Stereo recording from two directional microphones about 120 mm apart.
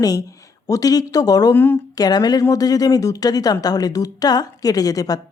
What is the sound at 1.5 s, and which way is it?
Speech, 15° left (ahead or behind).